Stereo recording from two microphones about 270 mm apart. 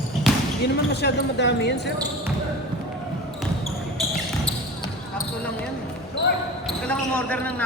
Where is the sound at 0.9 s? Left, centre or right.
Left.